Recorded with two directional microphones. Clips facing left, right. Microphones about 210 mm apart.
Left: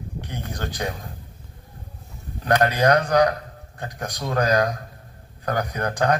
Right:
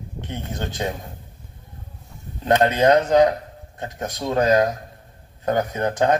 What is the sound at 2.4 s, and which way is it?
A man's voice, 25° right (ahead or behind).